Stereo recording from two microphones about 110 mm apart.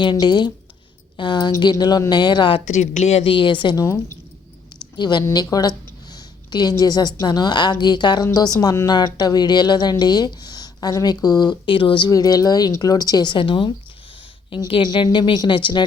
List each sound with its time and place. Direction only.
0.0 s speech: 45° left (ahead or behind)
2.6 s speech: 90° left
3.2 s speech: 50° left (ahead or behind)
4.9 s speech: 40° left (ahead or behind)
12.1 s speech: 35° left (ahead or behind)